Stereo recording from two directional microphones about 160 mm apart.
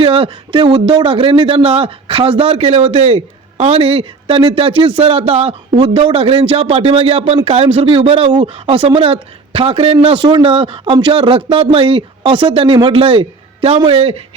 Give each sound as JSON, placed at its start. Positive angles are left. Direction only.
{"t": 0.0, "sound": "speech", "side_deg": -35}